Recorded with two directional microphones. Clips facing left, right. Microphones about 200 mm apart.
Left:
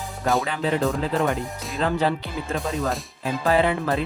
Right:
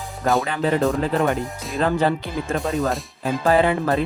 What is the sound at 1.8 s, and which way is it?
Speech, 50° right (ahead or behind).